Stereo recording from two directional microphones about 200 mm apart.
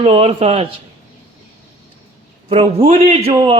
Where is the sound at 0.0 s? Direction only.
30° right (ahead or behind).